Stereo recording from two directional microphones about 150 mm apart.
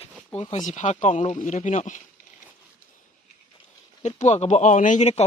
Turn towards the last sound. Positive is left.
turn(degrees=50)  # may be behind; listen again after turning